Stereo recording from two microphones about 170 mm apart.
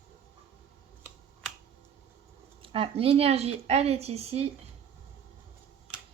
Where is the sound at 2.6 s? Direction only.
30° right (ahead or behind).